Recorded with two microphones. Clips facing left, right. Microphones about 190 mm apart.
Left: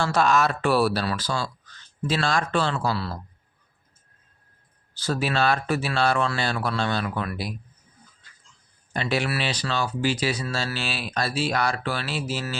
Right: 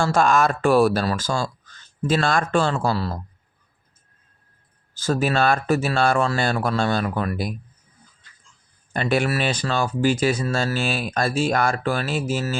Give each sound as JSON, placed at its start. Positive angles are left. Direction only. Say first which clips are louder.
{"t": 0.0, "sound": "speech", "louder": "right 3 dB", "side_deg": -45}
{"t": 4.9, "sound": "speech", "louder": "right 4 dB", "side_deg": -45}
{"t": 8.9, "sound": "speech", "louder": "right 4 dB", "side_deg": -50}